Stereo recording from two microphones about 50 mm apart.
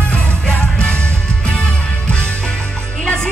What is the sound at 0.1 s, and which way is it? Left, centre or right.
Music, centre.